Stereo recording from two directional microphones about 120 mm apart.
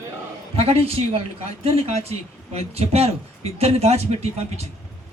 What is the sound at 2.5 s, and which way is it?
A man's voice, 60° right (ahead or behind).